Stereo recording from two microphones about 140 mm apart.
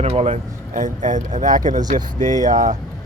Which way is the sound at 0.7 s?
65° right (ahead or behind).